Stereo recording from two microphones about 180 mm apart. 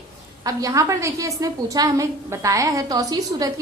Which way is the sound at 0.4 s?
20° right (ahead or behind).